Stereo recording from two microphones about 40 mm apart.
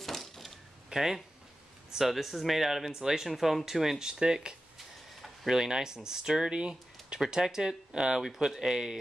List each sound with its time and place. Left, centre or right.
0.0 s a sound: centre
0.8 s speech: centre
4.0 s speech: centre
4.7 s tick-tock: centre
5.5 s speech: centre